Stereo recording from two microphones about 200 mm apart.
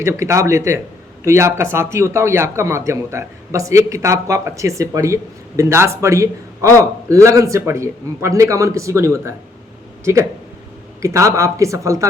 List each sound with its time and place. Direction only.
0.0 s a man's voice: 15° right (ahead or behind)